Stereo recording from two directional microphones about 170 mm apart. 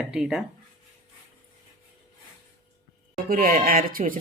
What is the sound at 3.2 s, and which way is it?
Speech, 55° right (ahead or behind).